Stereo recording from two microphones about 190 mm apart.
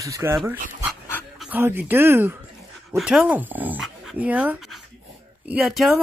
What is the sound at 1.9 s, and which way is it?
Speech, 10° right (ahead or behind).